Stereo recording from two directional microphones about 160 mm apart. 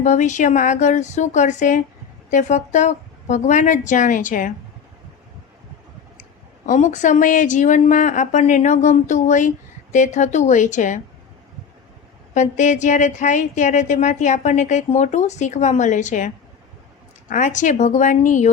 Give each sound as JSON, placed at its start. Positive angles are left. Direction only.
{"t": 0.0, "sound": "a woman's voice", "side_deg": 50}
{"t": 6.7, "sound": "a woman's voice", "side_deg": 50}
{"t": 12.3, "sound": "a woman's voice", "side_deg": 50}